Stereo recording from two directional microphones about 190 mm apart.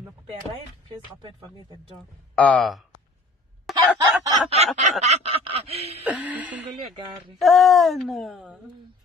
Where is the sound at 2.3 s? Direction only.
5° left (ahead or behind).